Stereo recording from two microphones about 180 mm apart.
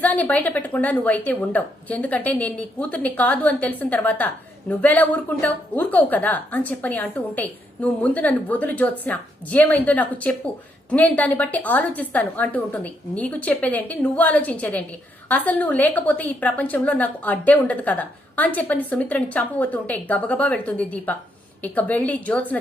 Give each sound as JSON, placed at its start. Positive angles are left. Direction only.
{"t": 0.0, "sound": "a woman's voice", "side_deg": 10}